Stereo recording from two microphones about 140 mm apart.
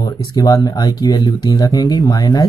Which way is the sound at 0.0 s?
30° left (ahead or behind).